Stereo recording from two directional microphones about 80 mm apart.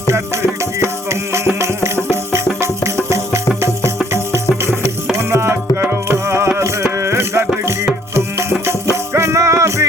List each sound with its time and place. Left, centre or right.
1.3 s music: right
5.1 s music: right
7.0 s rattle: right
8.1 s music: right